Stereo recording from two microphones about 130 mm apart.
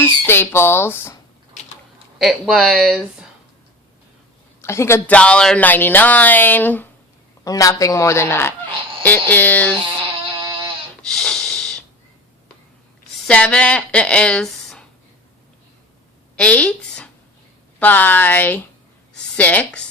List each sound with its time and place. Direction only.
0.0 s speech: 20° left (ahead or behind)
2.1 s speech: centre (ahead or behind)
4.6 s speech: 20° left (ahead or behind)
7.4 s speech: 25° left (ahead or behind)
10.3 s sheep: 40° right (ahead or behind)
11.0 s snort: 5° left (ahead or behind)
13.2 s speech: 5° left (ahead or behind)
16.3 s a sound: 10° left (ahead or behind)
17.7 s speech: 15° left (ahead or behind)